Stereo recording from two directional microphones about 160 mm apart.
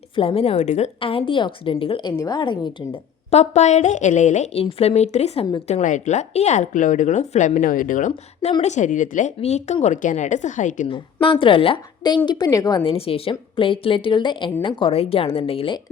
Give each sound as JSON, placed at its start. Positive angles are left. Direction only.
{"t": 0.2, "sound": "speech", "side_deg": 35}
{"t": 0.9, "sound": "a woman's voice", "side_deg": 35}
{"t": 10.8, "sound": "a woman's voice", "side_deg": 30}
{"t": 12.8, "sound": "a woman's voice", "side_deg": 35}